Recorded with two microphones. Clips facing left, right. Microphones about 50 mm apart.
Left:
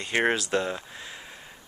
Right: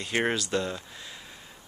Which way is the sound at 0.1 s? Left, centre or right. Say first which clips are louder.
Left 3 dB; centre.